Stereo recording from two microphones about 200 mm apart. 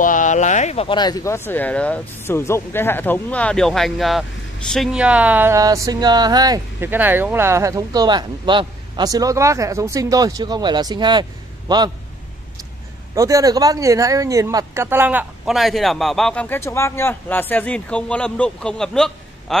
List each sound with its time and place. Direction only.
0.0 s a man's voice: 40° left (ahead or behind); by 11.8 s 20° right (ahead or behind)
13.1 s speech: 15° right (ahead or behind); by 19.6 s centre (ahead or behind)